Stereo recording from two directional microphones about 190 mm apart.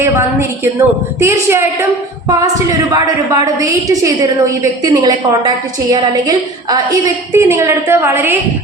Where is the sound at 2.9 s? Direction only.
20° right (ahead or behind).